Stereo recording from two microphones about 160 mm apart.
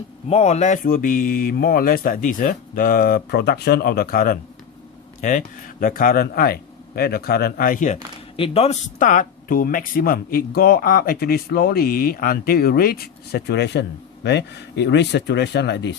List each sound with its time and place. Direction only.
0.3 s speech: 40° left (ahead or behind); by 4.4 s 65° left (ahead or behind)
5.2 s speech: 55° left (ahead or behind)
8.4 s speech: 40° left (ahead or behind)
9.0 s speech: 55° left (ahead or behind); by 16.0 s 90° left